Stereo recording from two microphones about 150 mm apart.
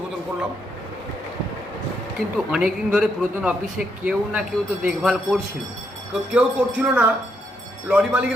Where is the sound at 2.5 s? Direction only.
5° right (ahead or behind).